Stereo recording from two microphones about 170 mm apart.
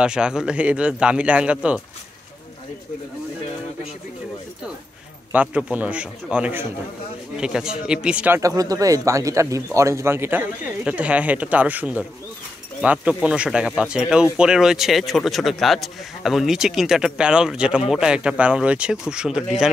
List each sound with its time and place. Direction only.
0.0 s speech: 5° right (ahead or behind)
5.3 s speech: 5° right (ahead or behind)
8.4 s speech: 20° right (ahead or behind); by 19.7 s 5° right (ahead or behind)